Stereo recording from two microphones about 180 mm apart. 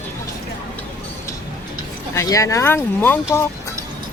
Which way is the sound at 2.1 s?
15° left (ahead or behind).